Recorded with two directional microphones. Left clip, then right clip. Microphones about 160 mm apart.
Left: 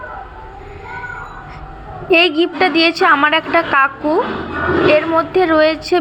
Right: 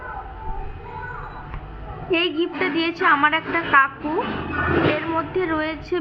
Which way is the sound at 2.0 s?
30° left (ahead or behind).